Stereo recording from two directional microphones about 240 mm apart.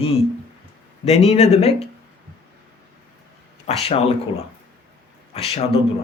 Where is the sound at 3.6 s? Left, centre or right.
Left.